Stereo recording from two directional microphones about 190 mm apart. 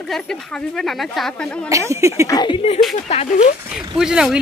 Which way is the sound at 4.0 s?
5° right (ahead or behind).